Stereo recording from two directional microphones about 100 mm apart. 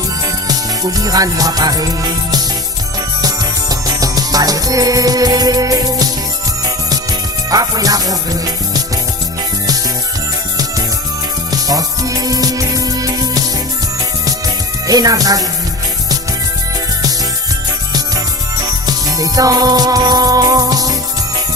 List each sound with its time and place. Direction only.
0.4 s music: 40° right (ahead or behind)
7.5 s music: 40° right (ahead or behind)
11.5 s music: 40° right (ahead or behind)
14.8 s music: 40° right (ahead or behind)
18.6 s music: 40° right (ahead or behind)